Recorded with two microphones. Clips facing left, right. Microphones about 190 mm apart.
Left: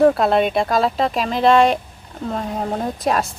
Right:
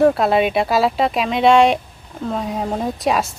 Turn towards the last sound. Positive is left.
turn(degrees=0)  # may be behind; listen again after turning